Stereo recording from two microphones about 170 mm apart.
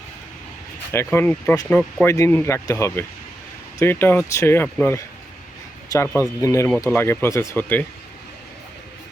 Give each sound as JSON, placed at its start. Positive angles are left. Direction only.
{"t": 0.9, "sound": "speech", "side_deg": 15}